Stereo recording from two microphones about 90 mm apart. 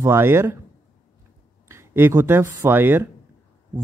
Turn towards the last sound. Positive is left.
turn(degrees=-25)  # may be behind; listen again after turning